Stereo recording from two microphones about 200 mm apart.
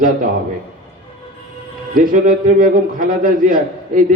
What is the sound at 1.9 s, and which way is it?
A man's voice, 45° right (ahead or behind).